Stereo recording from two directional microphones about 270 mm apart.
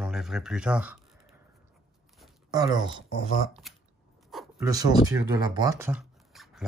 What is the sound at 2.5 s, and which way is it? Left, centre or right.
Speech, centre.